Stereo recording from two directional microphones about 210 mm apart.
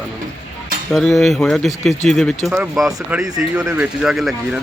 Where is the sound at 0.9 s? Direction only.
Centre (ahead or behind).